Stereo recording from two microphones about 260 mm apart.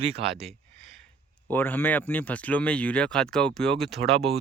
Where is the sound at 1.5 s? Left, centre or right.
Centre.